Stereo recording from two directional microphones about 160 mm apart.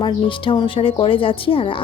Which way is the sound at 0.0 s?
30° left (ahead or behind).